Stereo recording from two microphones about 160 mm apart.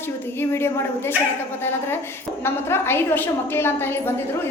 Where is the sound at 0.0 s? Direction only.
15° left (ahead or behind).